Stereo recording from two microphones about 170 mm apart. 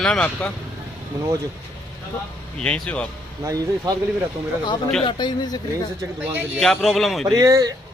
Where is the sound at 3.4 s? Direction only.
20° right (ahead or behind).